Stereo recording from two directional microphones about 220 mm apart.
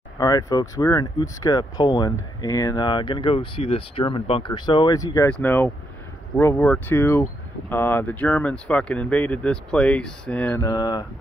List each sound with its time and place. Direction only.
0.2 s speech: 15° left (ahead or behind)